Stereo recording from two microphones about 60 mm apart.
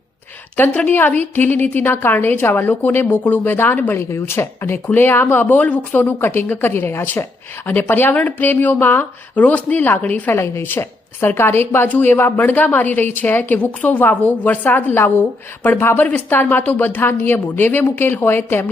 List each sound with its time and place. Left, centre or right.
0.5 s a woman's voice: left
10.3 s a woman's voice: left